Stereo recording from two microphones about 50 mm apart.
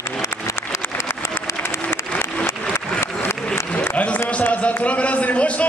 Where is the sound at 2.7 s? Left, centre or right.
Left.